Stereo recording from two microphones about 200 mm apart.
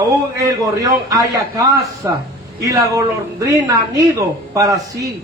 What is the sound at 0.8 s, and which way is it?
A man's voice, 15° right (ahead or behind).